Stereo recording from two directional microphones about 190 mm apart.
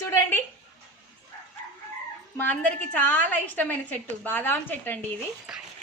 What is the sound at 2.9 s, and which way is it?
A woman's voice, 10° left (ahead or behind).